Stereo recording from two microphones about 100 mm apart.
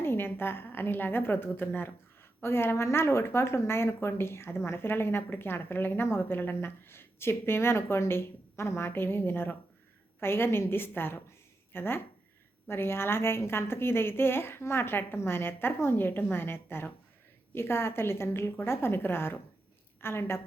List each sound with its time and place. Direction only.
0.0 s speech: 25° left (ahead or behind)